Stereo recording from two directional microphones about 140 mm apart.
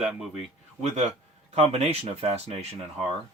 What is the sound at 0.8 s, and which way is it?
Speech, 50° right (ahead or behind).